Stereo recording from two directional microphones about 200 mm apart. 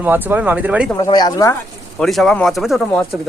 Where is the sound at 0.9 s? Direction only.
20° left (ahead or behind).